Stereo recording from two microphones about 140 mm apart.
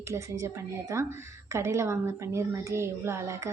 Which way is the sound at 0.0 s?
20° right (ahead or behind).